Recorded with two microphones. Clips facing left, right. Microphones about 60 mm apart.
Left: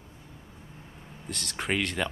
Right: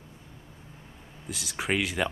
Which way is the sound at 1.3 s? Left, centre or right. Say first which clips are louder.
Right 1 dB; centre.